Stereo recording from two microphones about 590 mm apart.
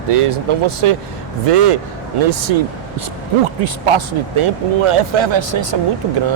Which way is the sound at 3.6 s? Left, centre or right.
Right.